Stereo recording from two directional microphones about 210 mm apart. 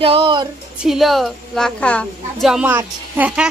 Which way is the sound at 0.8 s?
Centre (ahead or behind).